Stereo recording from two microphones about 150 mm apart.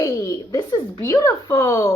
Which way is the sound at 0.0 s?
25° left (ahead or behind).